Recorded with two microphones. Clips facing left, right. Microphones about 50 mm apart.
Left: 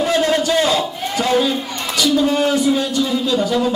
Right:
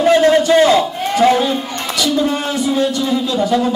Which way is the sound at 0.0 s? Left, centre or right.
Right.